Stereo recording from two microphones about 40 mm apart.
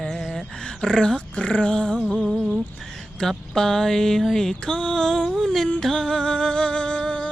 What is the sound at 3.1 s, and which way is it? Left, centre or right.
Mantra, centre.